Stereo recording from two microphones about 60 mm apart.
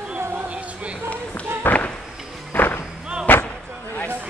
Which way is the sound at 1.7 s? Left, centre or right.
Left.